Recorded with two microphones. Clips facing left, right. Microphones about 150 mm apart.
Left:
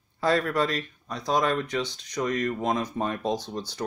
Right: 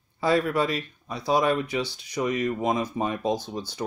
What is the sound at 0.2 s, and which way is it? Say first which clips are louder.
Speech: right 1 dB; 5° right (ahead or behind).